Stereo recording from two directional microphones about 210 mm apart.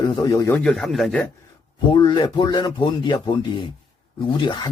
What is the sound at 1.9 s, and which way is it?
Speech, 20° left (ahead or behind).